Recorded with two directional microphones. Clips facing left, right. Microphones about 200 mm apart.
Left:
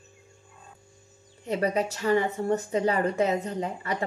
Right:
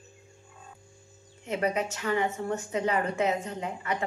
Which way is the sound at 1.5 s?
35° left (ahead or behind).